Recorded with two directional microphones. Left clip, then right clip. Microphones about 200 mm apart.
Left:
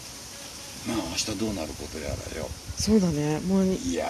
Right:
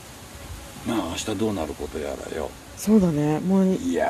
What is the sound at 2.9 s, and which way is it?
Speech, 5° right (ahead or behind).